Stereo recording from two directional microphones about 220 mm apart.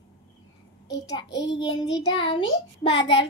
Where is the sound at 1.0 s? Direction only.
20° left (ahead or behind).